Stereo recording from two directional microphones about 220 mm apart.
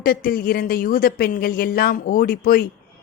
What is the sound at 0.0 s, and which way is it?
Speech, 40° left (ahead or behind).